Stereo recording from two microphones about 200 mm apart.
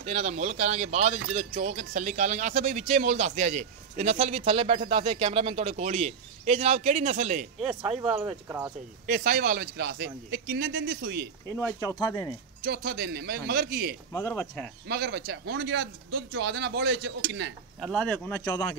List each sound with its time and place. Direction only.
0.0 s speech: 30° right (ahead or behind)
7.8 s speech: 25° right (ahead or behind)
8.3 s speech: 15° right (ahead or behind)
9.0 s a man's voice: 45° right (ahead or behind)
11.8 s speech: 15° left (ahead or behind)
12.6 s a man's voice: 50° right (ahead or behind)
14.1 s speech: 10° left (ahead or behind)
14.9 s speech: 55° right (ahead or behind)
17.7 s speech: 5° left (ahead or behind)